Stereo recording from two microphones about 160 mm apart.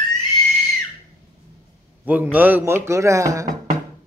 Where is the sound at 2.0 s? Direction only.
10° right (ahead or behind).